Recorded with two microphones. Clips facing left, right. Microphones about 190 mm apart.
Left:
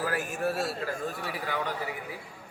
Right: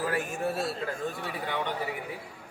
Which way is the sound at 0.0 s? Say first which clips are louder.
Even; 25° right (ahead or behind).